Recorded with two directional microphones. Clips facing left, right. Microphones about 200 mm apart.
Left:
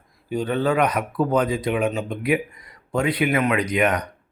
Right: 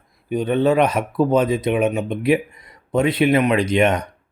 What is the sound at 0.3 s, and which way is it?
Speech, 20° right (ahead or behind).